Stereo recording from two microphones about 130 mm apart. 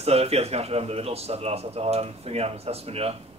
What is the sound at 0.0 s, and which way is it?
Speech, 50° right (ahead or behind).